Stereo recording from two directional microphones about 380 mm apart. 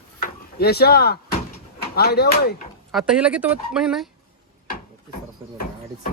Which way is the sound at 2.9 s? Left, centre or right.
Centre.